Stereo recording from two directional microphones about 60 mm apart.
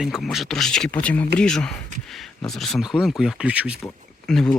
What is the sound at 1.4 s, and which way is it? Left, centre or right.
Speech, centre.